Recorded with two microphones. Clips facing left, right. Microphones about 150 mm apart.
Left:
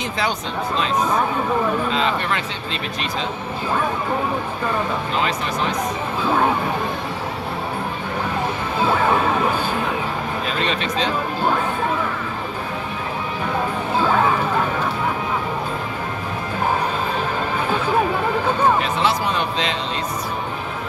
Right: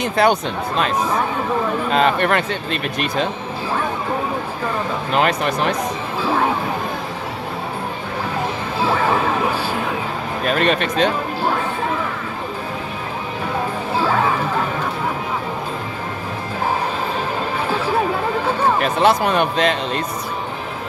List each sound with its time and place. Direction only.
0.0 s speech: 55° right (ahead or behind)
5.1 s speech: 60° right (ahead or behind)
10.4 s speech: 55° right (ahead or behind)
18.8 s speech: 55° right (ahead or behind)